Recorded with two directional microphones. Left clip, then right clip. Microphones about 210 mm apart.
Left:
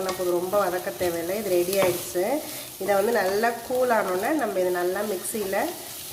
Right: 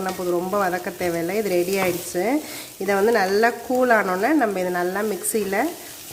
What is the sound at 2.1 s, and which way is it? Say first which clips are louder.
Speech: right 4 dB; 40° right (ahead or behind).